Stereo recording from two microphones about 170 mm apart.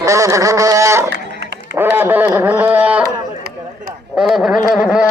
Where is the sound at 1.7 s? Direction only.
10° right (ahead or behind).